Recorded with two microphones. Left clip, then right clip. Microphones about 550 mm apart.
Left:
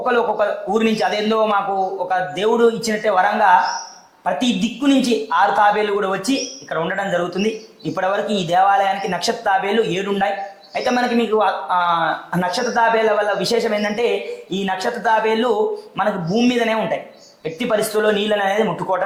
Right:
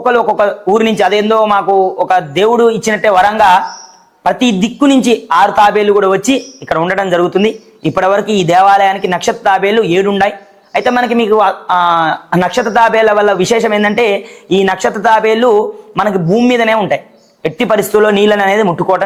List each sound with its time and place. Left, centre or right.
0.0 s a man's voice: right